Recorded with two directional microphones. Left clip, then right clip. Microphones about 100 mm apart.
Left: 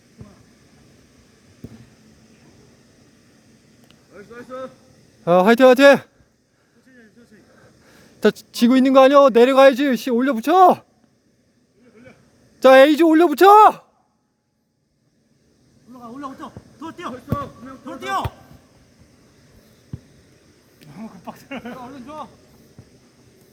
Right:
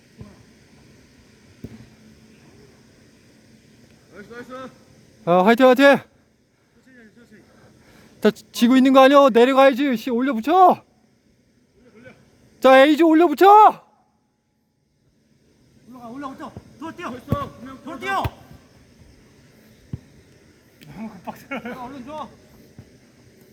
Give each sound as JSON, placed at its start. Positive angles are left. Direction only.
{"t": 4.1, "sound": "speech", "side_deg": -55}
{"t": 5.2, "sound": "a man's voice", "side_deg": 15}
{"t": 6.9, "sound": "a sound", "side_deg": 5}
{"t": 7.5, "sound": "a man's voice", "side_deg": 20}
{"t": 9.5, "sound": "speech", "side_deg": 20}
{"t": 12.5, "sound": "speech", "side_deg": 15}
{"t": 15.9, "sound": "a sound", "side_deg": 30}
{"t": 17.3, "sound": "speech", "side_deg": -55}
{"t": 17.8, "sound": "speech", "side_deg": 30}
{"t": 19.9, "sound": "a sound", "side_deg": -30}
{"t": 20.8, "sound": "speech", "side_deg": -10}
{"t": 21.8, "sound": "speech", "side_deg": 60}